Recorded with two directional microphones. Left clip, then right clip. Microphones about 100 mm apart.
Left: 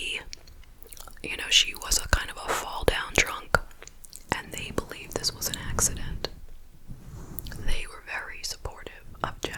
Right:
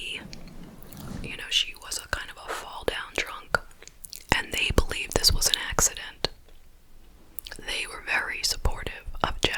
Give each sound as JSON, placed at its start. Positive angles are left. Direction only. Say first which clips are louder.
{"t": 0.0, "sound": "whispering", "louder": "left 2 dB", "side_deg": 20}
{"t": 0.9, "sound": "whispering", "louder": "left 3 dB", "side_deg": 35}
{"t": 4.1, "sound": "whispering", "louder": "right 6 dB", "side_deg": -20}
{"t": 7.4, "sound": "whispering", "louder": "right 7 dB", "side_deg": -15}